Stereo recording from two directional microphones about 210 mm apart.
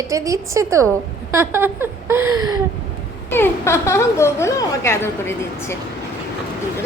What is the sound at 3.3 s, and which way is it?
A woman's voice, 10° left (ahead or behind).